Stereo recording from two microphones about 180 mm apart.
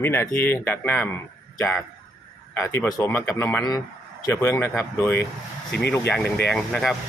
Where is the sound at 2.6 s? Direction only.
15° left (ahead or behind).